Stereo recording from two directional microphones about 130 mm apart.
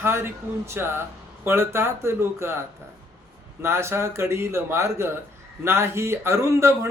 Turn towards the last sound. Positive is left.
turn(degrees=-20)  # may be behind; listen again after turning